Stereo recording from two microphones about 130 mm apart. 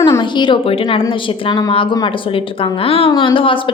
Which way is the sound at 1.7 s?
40° left (ahead or behind).